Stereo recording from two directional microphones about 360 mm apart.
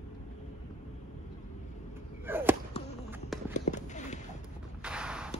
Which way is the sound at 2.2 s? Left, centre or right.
Centre.